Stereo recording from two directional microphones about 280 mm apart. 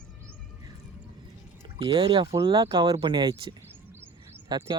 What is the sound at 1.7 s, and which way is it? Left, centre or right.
Speech, centre.